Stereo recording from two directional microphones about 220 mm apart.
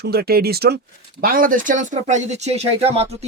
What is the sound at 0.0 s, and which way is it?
Speech, 45° right (ahead or behind).